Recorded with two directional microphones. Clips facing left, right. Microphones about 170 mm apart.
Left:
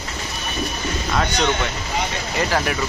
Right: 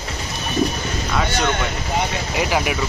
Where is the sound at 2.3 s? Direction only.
10° right (ahead or behind).